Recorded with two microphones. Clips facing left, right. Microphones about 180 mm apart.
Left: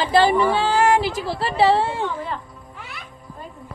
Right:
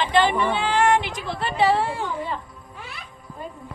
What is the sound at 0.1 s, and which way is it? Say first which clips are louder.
A woman's voice: left 5 dB; 40° left (ahead or behind).